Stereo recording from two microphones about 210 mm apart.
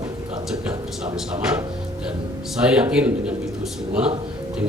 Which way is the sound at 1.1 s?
5° right (ahead or behind).